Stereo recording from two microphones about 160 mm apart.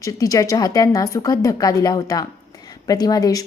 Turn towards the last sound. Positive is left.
turn(degrees=25)  # may be behind; listen again after turning